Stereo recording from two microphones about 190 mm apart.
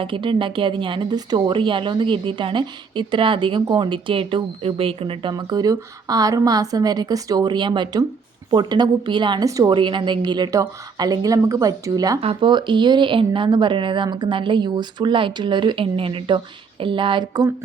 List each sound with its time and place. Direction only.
0.0 s a woman's voice: 25° right (ahead or behind)